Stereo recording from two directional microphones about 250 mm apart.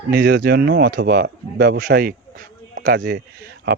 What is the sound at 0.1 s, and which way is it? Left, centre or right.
Speech, right.